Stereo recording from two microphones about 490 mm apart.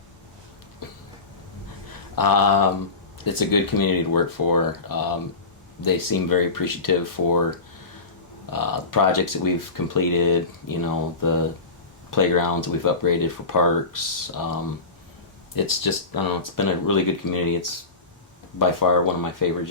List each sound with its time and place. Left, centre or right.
2.1 s speech: left
8.4 s speech: left
18.8 s speech: left